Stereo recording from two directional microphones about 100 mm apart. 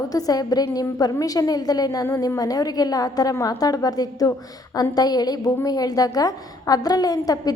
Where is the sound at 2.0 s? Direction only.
30° left (ahead or behind).